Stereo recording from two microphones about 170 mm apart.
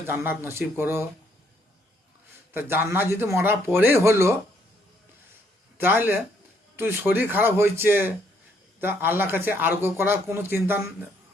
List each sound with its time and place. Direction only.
0.1 s a man's voice: 15° right (ahead or behind)
2.5 s a man's voice: 15° right (ahead or behind)
5.7 s a man's voice: 10° right (ahead or behind)